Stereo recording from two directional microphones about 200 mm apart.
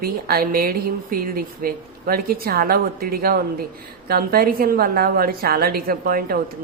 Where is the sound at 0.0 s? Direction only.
50° right (ahead or behind).